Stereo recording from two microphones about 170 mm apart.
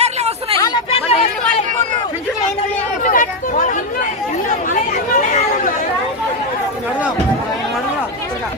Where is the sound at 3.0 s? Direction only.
50° left (ahead or behind).